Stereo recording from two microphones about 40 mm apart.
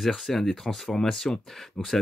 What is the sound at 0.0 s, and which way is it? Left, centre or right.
Speech, centre.